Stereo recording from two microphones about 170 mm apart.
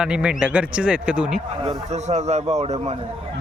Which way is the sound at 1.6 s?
40° right (ahead or behind).